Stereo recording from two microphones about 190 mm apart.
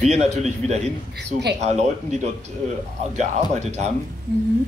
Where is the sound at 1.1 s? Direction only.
60° right (ahead or behind).